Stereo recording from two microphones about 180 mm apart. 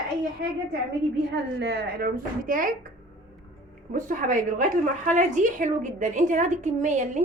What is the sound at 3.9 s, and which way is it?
A woman's voice, 45° right (ahead or behind).